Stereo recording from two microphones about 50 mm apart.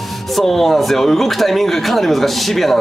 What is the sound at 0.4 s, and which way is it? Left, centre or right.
Speech, centre.